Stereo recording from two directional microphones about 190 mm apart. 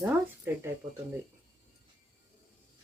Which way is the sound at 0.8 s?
20° right (ahead or behind).